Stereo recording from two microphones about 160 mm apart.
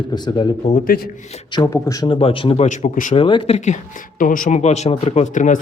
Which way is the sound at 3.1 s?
35° left (ahead or behind).